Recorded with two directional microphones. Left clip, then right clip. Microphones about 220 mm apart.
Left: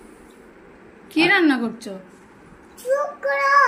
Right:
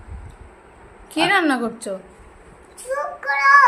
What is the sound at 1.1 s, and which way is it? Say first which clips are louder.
Speech: left 1 dB; 25° right (ahead or behind).